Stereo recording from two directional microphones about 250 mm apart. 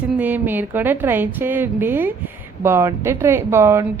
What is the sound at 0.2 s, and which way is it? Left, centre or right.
A woman's voice, centre.